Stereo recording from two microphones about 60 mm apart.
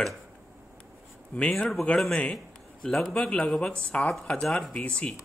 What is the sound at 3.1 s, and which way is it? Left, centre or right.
Speech, centre.